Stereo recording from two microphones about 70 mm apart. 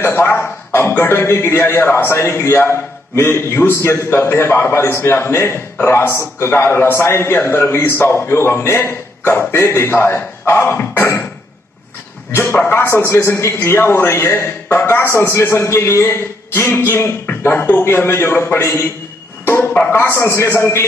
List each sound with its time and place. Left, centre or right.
0.0 s a man's voice: left
12.3 s a man's voice: left
19.4 s a sound: left
19.9 s a man's voice: left